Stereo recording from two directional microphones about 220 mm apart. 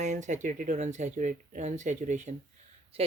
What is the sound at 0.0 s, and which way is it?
Speech, 35° right (ahead or behind).